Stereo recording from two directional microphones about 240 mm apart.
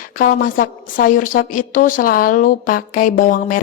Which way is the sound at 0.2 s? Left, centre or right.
Left.